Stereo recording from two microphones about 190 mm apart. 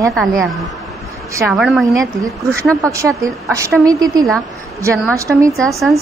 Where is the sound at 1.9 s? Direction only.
15° right (ahead or behind).